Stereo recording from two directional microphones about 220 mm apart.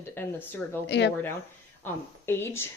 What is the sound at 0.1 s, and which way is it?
Speech, 10° left (ahead or behind).